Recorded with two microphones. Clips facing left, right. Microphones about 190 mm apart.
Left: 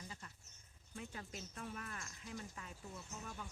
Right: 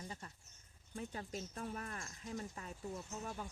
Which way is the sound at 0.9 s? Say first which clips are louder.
Right 5 dB; 35° right (ahead or behind).